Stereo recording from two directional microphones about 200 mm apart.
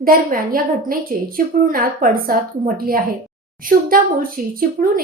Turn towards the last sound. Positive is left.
turn(degrees=-45)  # may be behind; listen again after turning